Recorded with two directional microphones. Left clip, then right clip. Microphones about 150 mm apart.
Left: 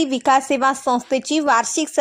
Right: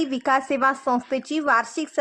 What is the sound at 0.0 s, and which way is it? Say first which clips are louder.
Speech: left 5 dB; 25° left (ahead or behind).